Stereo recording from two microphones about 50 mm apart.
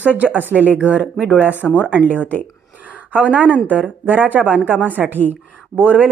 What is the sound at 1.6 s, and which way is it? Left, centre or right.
Speech, centre.